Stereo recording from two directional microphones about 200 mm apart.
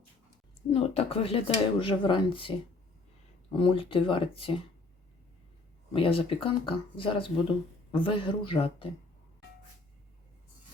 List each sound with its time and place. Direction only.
0.7 s speech: 30° left (ahead or behind)
5.9 s speech: 25° left (ahead or behind)